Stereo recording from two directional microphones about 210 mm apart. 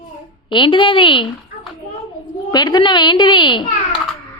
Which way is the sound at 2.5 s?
20° left (ahead or behind).